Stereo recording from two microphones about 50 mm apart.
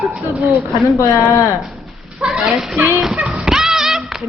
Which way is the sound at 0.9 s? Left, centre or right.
Left.